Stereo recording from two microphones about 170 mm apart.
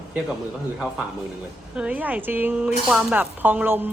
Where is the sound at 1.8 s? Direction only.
10° right (ahead or behind).